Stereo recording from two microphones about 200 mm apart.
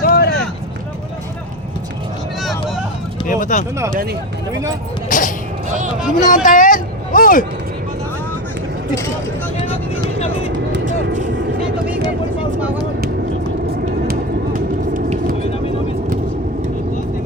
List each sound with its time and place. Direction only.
0.0 s vehicle: 50° left (ahead or behind)
2.4 s vehicle: centre (ahead or behind)
3.2 s speech: 40° left (ahead or behind)
5.0 s a sound: 40° left (ahead or behind)
5.6 s music: 40° right (ahead or behind)
6.2 s speech: 40° left (ahead or behind)
10.7 s vehicle: 65° right (ahead or behind)
13.7 s vehicle: 45° right (ahead or behind)